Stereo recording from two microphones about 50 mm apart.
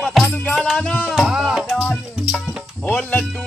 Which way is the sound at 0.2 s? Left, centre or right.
Centre.